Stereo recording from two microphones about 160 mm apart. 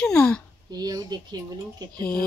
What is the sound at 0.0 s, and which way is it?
Speech, 5° left (ahead or behind).